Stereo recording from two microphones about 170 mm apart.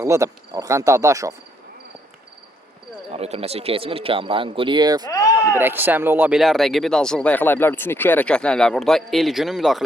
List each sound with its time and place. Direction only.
0.0 s speech: 20° right (ahead or behind)
3.1 s speech: 35° right (ahead or behind)
5.0 s speech: 20° left (ahead or behind)
5.5 s speech: 10° right (ahead or behind)